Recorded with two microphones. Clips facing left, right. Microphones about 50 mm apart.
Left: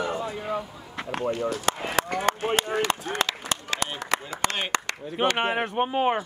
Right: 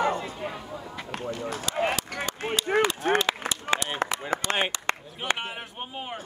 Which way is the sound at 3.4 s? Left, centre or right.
Right.